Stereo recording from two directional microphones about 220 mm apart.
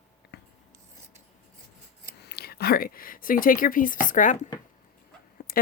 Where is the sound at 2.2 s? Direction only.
45° left (ahead or behind).